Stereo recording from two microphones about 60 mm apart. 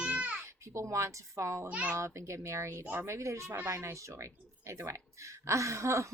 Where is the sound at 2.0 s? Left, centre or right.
Right.